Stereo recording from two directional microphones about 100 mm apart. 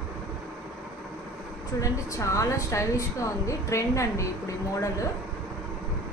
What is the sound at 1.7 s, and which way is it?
A woman's voice, 30° left (ahead or behind).